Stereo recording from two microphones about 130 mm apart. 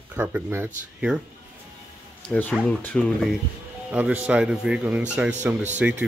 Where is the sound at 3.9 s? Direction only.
10° right (ahead or behind).